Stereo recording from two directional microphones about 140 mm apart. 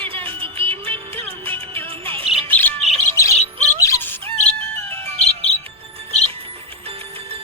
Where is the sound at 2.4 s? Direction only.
15° left (ahead or behind).